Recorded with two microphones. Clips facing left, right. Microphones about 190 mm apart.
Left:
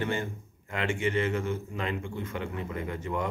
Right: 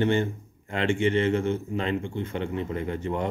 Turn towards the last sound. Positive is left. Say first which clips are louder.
# right 4 dB
turn(degrees=-30)  # may be behind; listen again after turning